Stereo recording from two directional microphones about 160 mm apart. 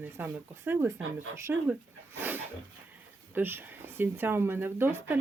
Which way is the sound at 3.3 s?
15° right (ahead or behind).